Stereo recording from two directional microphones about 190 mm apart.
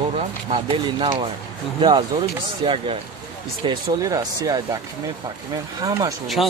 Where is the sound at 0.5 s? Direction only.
30° right (ahead or behind).